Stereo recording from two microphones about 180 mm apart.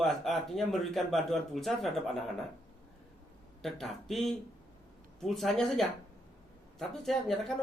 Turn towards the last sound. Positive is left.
turn(degrees=0)  # may be behind; listen again after turning